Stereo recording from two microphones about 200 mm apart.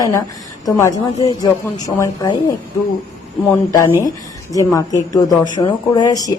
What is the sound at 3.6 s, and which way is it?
Speech, 15° left (ahead or behind).